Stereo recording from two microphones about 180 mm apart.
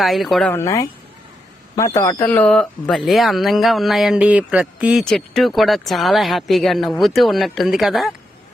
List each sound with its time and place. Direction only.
0.0 s speech: centre (ahead or behind)
0.5 s speech: 15° left (ahead or behind); by 8.1 s centre (ahead or behind)